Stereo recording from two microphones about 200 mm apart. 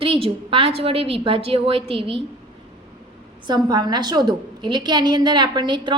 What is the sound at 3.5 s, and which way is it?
A woman's voice, 20° right (ahead or behind).